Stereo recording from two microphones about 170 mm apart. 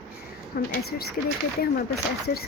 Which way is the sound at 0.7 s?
65° left (ahead or behind).